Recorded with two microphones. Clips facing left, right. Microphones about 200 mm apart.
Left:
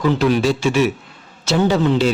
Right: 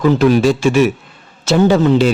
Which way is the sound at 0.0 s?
50° right (ahead or behind).